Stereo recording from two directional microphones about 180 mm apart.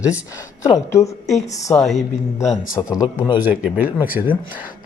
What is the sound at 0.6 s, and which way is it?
Speech, 15° left (ahead or behind).